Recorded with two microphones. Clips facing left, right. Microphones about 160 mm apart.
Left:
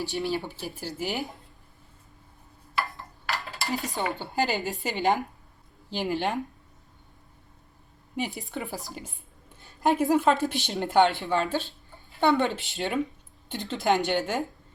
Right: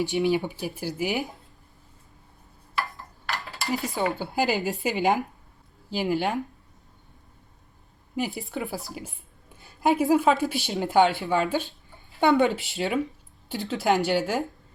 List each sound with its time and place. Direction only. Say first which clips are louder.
0.0 s speech: right 6 dB; 20° right (ahead or behind); by 1.4 s centre (ahead or behind)
2.7 s a sound: even; centre (ahead or behind)
3.8 s speech: right 3 dB; centre (ahead or behind)
8.4 s a woman's voice: right 3 dB; centre (ahead or behind)